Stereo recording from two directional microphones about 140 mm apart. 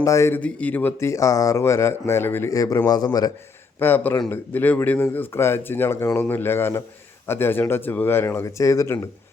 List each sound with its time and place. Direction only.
0.0 s speech: 20° left (ahead or behind)
3.8 s speech: 15° left (ahead or behind)